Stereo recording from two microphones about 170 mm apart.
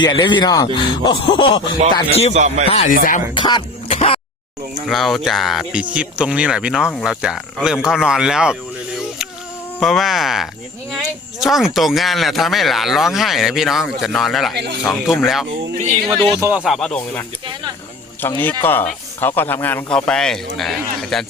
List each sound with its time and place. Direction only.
0.0 s speech: 30° left (ahead or behind)
2.3 s speech: 40° right (ahead or behind)
2.6 s speech: 40° left (ahead or behind)
2.9 s speech: 55° left (ahead or behind)
3.3 s music: 30° left (ahead or behind)
4.9 s speech: centre (ahead or behind)
9.8 s speech: centre (ahead or behind)
14.5 s speech: 80° right
14.8 s speech: centre (ahead or behind)
16.5 s speech: 5° right (ahead or behind)